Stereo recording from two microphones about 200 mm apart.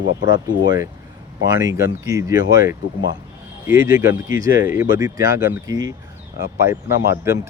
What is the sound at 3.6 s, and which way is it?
Speech, 10° right (ahead or behind).